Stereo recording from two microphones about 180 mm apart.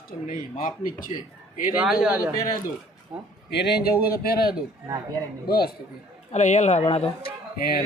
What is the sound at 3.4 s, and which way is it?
Speech, 65° left (ahead or behind).